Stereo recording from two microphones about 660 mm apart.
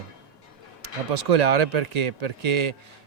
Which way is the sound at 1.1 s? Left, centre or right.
Right.